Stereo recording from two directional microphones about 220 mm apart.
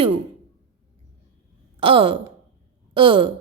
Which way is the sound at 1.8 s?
25° right (ahead or behind).